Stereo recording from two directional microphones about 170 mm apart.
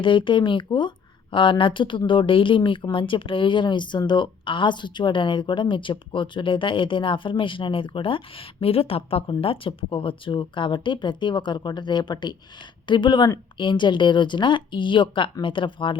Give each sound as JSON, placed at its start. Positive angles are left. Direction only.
{"t": 0.0, "sound": "speech", "side_deg": 30}